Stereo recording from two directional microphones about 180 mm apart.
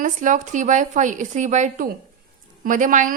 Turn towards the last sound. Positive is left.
turn(degrees=-45)  # may be behind; listen again after turning